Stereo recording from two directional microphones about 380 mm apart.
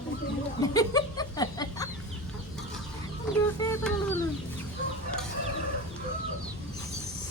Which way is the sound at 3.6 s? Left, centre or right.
Centre.